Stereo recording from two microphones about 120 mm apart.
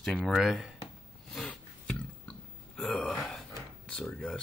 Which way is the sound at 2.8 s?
5° left (ahead or behind).